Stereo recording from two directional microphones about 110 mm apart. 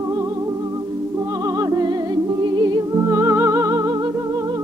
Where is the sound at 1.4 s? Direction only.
30° right (ahead or behind).